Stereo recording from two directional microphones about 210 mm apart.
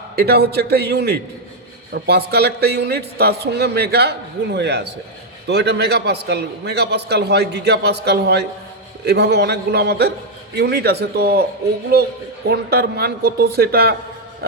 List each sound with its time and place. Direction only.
0.2 s a man's voice: 50° right (ahead or behind)
12.5 s a man's voice: 50° right (ahead or behind)